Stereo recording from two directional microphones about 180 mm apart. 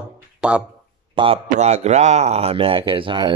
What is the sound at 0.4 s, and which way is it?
Speech, 5° right (ahead or behind).